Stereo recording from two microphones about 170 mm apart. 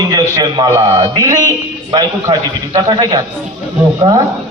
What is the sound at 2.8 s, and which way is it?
Speech, 25° right (ahead or behind).